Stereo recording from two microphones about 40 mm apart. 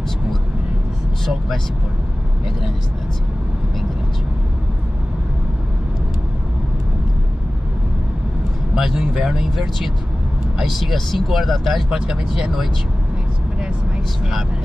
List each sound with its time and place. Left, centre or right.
8.7 s speech: centre
10.6 s speech: centre
11.9 s speech: centre